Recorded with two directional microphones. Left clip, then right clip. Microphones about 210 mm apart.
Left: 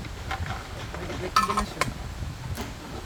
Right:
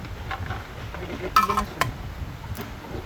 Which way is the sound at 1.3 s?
35° right (ahead or behind).